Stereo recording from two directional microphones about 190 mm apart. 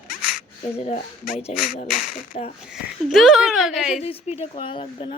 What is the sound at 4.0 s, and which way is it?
A woman's voice, 35° left (ahead or behind).